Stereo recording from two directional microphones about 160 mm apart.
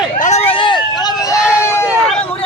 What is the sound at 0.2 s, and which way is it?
Vehicle, 45° left (ahead or behind).